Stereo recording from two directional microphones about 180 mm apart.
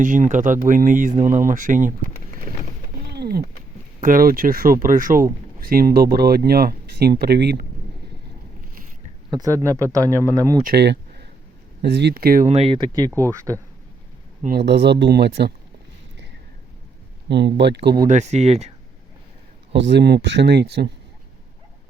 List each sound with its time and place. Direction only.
0.0 s speech: 45° right (ahead or behind)
3.1 s a sound: 60° right (ahead or behind)
4.0 s speech: 50° right (ahead or behind)
9.3 s speech: 20° right (ahead or behind)
10.6 s speech: 60° right (ahead or behind)
12.5 s speech: 35° right (ahead or behind)
13.1 s speech: 15° right (ahead or behind)
14.4 s speech: 60° right (ahead or behind)
17.2 s speech: 75° right (ahead or behind)
18.1 s speech: 40° right (ahead or behind)
19.7 s speech: 75° right (ahead or behind)